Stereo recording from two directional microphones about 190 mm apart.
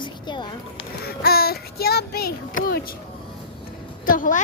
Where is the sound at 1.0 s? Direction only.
55° left (ahead or behind).